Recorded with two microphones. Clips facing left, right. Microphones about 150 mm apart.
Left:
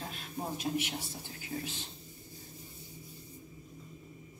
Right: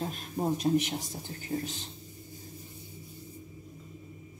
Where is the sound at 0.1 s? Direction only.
40° right (ahead or behind).